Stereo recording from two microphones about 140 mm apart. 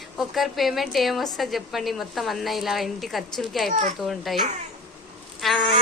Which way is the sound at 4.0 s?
Centre (ahead or behind).